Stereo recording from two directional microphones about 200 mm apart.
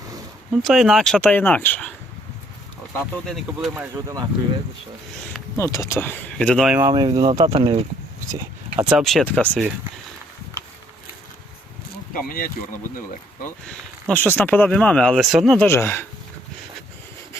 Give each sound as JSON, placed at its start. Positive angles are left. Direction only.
{"t": 0.5, "sound": "speech", "side_deg": 0}
{"t": 3.2, "sound": "speech", "side_deg": 0}
{"t": 3.9, "sound": "speech", "side_deg": -20}
{"t": 5.5, "sound": "speech", "side_deg": 15}
{"t": 6.7, "sound": "speech", "side_deg": -15}
{"t": 8.8, "sound": "speech", "side_deg": 0}
{"t": 12.1, "sound": "speech", "side_deg": 45}
{"t": 13.7, "sound": "speech", "side_deg": 10}
{"t": 15.6, "sound": "speech", "side_deg": 10}